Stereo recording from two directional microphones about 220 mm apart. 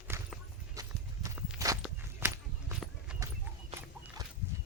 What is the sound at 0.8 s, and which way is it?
Walk, 10° right (ahead or behind).